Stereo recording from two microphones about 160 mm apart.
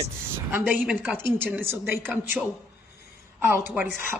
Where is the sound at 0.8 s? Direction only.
10° right (ahead or behind).